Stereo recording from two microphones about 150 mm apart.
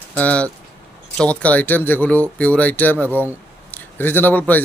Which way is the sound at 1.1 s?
5° left (ahead or behind).